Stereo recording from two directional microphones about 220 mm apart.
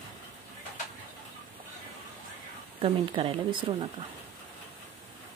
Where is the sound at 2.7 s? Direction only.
25° right (ahead or behind).